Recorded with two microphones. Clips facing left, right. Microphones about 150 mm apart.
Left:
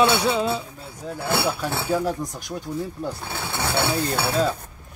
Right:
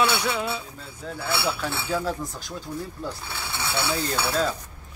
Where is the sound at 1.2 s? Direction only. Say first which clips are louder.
Left 3 dB; 50° left (ahead or behind).